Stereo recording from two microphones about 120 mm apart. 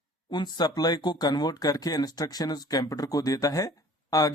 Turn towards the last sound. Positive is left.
turn(degrees=30)  # may be behind; listen again after turning